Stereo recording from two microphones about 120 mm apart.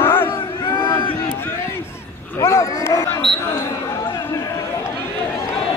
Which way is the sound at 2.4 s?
25° left (ahead or behind).